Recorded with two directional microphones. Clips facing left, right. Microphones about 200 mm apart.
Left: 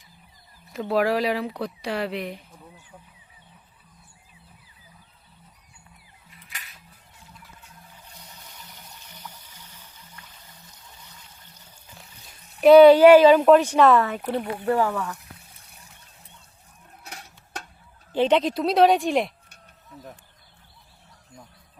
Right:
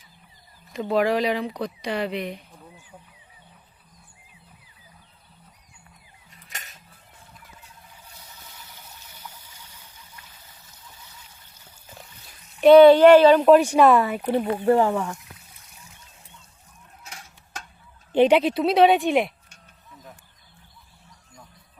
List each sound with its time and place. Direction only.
0.7 s speech: centre (ahead or behind)
6.3 s a sound: 45° right (ahead or behind)
9.1 s water: 10° right (ahead or behind)
12.5 s speech: centre (ahead or behind)
13.5 s speech: 10° right (ahead or behind)
14.5 s speech: 20° right (ahead or behind)
18.1 s speech: 15° right (ahead or behind)